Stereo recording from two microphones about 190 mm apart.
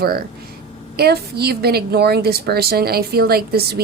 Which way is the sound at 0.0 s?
55° right (ahead or behind).